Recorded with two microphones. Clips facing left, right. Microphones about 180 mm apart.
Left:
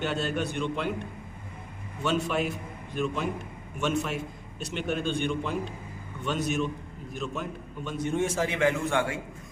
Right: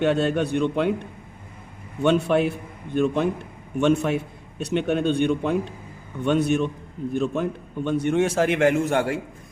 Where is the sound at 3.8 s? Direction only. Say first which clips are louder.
Right 8 dB; 60° right (ahead or behind).